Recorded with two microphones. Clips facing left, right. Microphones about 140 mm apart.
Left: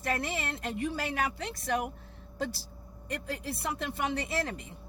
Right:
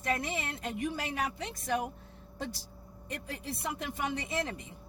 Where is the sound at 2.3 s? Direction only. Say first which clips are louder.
Left 4 dB; 75° left (ahead or behind).